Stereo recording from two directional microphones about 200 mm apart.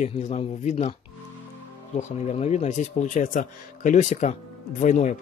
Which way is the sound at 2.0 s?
35° left (ahead or behind).